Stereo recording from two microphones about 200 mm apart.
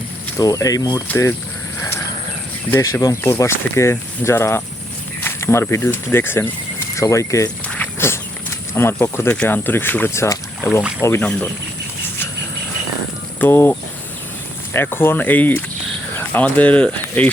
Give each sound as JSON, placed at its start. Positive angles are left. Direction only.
{"t": 0.3, "sound": "speech", "side_deg": 15}
{"t": 2.6, "sound": "speech", "side_deg": 15}
{"t": 13.4, "sound": "speech", "side_deg": 10}